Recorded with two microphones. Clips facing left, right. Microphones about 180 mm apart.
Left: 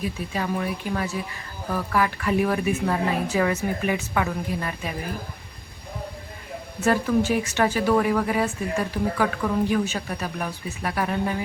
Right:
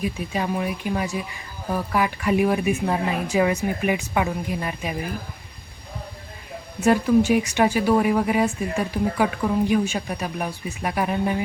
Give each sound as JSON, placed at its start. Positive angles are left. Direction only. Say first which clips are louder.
{"t": 0.0, "sound": "speech", "louder": "right 2 dB", "side_deg": -15}
{"t": 6.8, "sound": "speech", "louder": "right 4 dB", "side_deg": -15}